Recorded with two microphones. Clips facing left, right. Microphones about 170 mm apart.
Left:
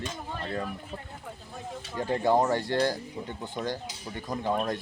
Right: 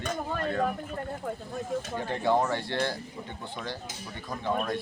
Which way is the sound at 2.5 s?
40° left (ahead or behind).